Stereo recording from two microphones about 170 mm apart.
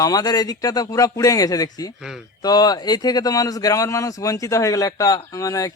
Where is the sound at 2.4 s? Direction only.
25° left (ahead or behind).